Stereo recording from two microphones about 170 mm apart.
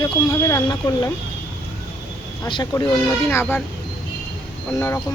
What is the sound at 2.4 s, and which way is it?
Speech, 25° left (ahead or behind).